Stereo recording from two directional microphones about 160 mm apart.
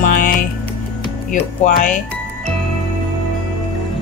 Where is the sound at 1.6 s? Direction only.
55° left (ahead or behind).